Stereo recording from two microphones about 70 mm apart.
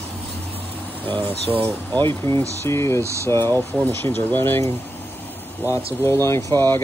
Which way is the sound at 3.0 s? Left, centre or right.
Right.